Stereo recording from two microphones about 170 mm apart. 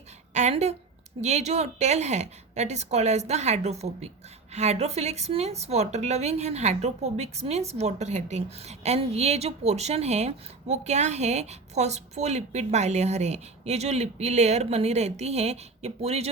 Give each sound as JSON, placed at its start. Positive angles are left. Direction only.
{"t": 0.3, "sound": "a woman's voice", "side_deg": -40}